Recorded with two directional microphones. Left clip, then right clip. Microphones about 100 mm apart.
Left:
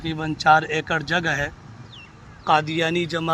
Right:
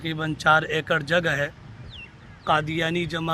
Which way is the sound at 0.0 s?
50° right (ahead or behind).